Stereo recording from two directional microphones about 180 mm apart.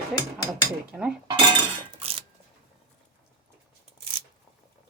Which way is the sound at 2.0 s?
35° right (ahead or behind).